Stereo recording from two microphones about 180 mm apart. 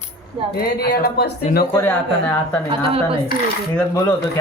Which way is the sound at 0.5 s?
60° left (ahead or behind).